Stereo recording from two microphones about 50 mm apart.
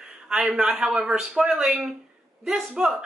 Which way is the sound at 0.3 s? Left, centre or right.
Centre.